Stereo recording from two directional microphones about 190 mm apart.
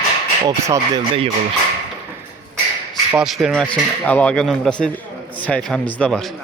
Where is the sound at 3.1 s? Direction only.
5° right (ahead or behind).